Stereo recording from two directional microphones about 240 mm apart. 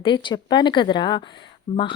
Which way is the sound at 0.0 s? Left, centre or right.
Centre.